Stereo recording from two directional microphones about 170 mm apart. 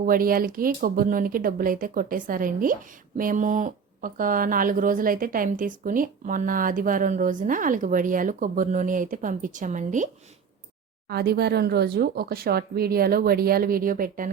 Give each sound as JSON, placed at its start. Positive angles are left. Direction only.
{"t": 0.0, "sound": "speech", "side_deg": -55}
{"t": 11.1, "sound": "speech", "side_deg": -70}